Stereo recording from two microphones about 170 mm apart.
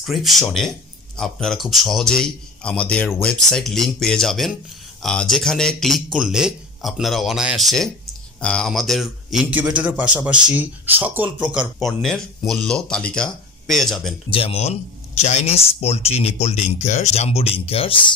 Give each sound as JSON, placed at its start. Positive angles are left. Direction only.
{"t": 0.0, "sound": "a man's voice", "side_deg": 0}
{"t": 14.3, "sound": "speech", "side_deg": 35}